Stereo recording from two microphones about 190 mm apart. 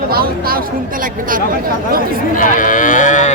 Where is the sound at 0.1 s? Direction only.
50° right (ahead or behind).